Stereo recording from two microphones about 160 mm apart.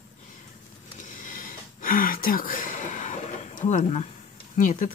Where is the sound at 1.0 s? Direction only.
55° left (ahead or behind).